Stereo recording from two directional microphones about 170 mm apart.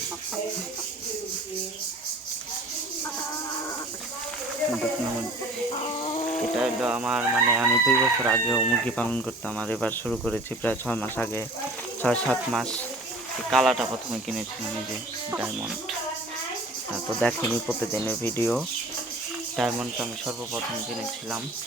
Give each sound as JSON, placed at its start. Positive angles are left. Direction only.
{"t": 5.8, "sound": "a sound", "side_deg": 35}
{"t": 6.6, "sound": "chicken", "side_deg": -5}
{"t": 8.4, "sound": "speech", "side_deg": 5}
{"t": 15.3, "sound": "chicken", "side_deg": -10}
{"t": 17.2, "sound": "speech", "side_deg": 5}
{"t": 19.5, "sound": "speech", "side_deg": -5}